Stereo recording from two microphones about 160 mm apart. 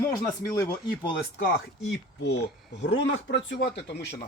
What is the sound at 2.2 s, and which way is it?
Speech, 90° left.